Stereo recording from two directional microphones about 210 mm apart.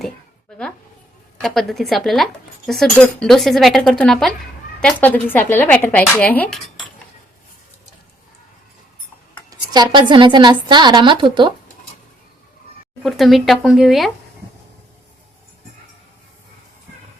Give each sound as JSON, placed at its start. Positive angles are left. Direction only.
{"t": 1.4, "sound": "speech", "side_deg": 0}
{"t": 9.5, "sound": "a woman's voice", "side_deg": -20}
{"t": 13.0, "sound": "speech", "side_deg": 0}